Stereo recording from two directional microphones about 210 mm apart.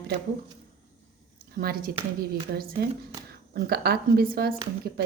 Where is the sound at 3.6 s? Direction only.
50° right (ahead or behind).